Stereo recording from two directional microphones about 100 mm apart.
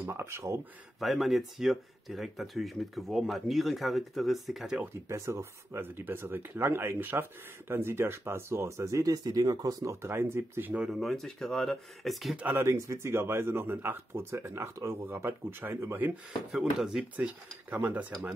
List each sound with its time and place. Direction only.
0.0 s speech: 25° right (ahead or behind)
0.9 s speech: centre (ahead or behind)
5.0 s speech: 30° right (ahead or behind)
10.7 s speech: 5° right (ahead or behind)
12.4 s speech: 25° right (ahead or behind)
16.5 s speech: 5° right (ahead or behind)